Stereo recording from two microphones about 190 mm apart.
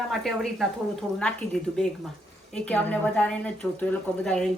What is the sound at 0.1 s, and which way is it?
Speech, centre (ahead or behind).